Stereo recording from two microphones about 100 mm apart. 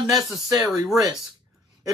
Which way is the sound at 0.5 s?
35° right (ahead or behind).